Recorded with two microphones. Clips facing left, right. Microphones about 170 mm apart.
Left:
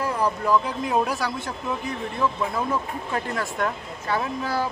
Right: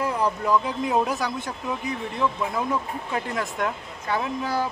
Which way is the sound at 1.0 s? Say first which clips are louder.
Even; 20° right (ahead or behind).